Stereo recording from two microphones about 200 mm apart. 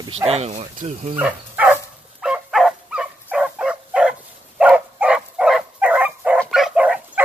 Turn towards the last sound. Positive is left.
turn(degrees=-5)  # may be behind; listen again after turning